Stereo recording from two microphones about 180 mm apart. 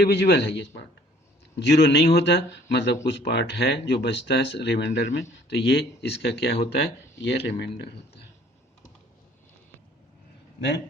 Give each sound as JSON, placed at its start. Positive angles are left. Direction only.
{"t": 0.0, "sound": "speech", "side_deg": 65}